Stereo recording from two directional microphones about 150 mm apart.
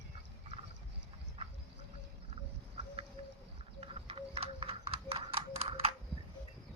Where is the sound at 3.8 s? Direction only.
40° right (ahead or behind).